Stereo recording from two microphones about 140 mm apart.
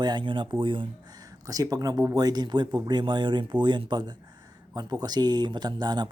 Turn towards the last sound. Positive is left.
turn(degrees=-30)  # may be behind; listen again after turning